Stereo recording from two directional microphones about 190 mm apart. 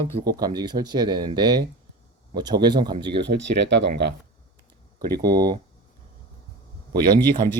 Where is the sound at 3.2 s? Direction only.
70° right (ahead or behind).